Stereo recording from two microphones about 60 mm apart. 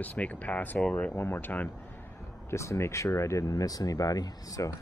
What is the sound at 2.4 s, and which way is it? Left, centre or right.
Speech, left.